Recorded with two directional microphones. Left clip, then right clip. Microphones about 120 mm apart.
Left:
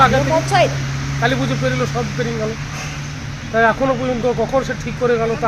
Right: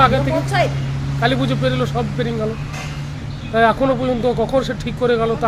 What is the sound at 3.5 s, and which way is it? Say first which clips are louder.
Speech: even; 55° right (ahead or behind).